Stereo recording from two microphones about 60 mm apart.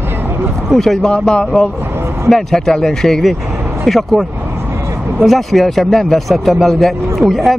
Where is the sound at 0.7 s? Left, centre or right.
Centre.